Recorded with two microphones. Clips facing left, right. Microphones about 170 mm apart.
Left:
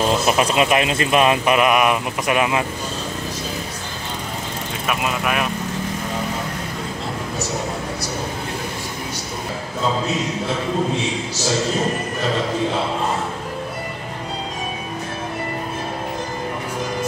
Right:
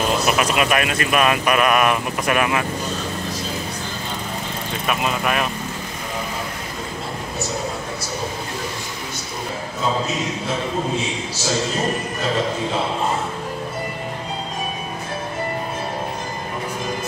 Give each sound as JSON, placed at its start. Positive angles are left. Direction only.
{"t": 0.3, "sound": "speech", "side_deg": 30}
{"t": 4.8, "sound": "speech", "side_deg": 5}